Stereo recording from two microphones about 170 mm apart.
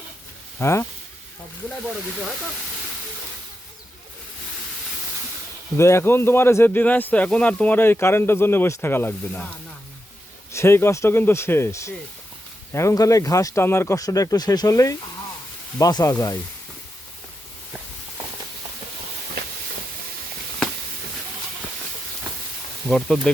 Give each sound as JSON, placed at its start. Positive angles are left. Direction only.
{"t": 0.6, "sound": "speech", "side_deg": 15}
{"t": 5.7, "sound": "speech", "side_deg": 15}
{"t": 10.5, "sound": "speech", "side_deg": 15}
{"t": 22.9, "sound": "speech", "side_deg": 5}